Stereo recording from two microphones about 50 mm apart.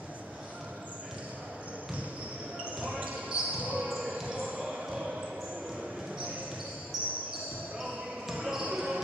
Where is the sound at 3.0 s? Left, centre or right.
Right.